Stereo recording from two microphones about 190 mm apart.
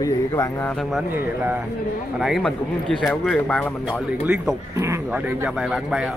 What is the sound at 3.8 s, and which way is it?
Speech, 5° right (ahead or behind).